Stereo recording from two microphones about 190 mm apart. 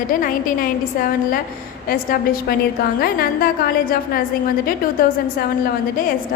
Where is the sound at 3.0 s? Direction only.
50° left (ahead or behind).